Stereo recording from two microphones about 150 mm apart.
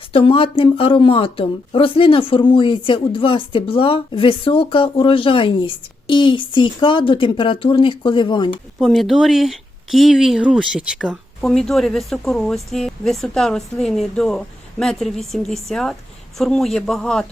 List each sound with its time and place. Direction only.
0.1 s speech: 35° left (ahead or behind)
8.8 s a woman's voice: centre (ahead or behind)